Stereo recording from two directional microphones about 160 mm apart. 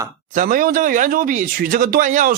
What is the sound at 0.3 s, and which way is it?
Speech, 60° right (ahead or behind).